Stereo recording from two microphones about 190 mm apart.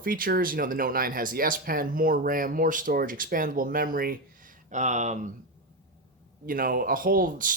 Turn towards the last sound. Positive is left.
turn(degrees=-45)  # may be behind; listen again after turning